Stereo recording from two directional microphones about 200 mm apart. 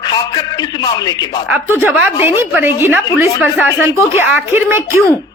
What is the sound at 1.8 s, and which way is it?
Speech, 10° right (ahead or behind).